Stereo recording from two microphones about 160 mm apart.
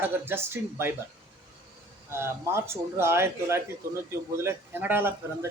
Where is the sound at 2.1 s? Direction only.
15° right (ahead or behind).